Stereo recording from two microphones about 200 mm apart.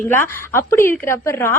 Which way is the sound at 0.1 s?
10° left (ahead or behind).